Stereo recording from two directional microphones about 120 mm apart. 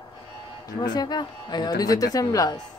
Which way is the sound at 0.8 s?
35° left (ahead or behind).